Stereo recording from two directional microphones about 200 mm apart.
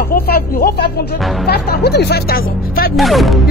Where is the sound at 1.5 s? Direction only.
50° left (ahead or behind).